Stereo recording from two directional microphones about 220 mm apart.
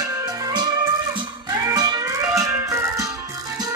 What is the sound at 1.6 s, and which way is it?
Music, 15° right (ahead or behind).